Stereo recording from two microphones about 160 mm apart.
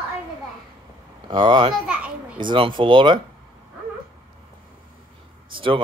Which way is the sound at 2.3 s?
30° right (ahead or behind).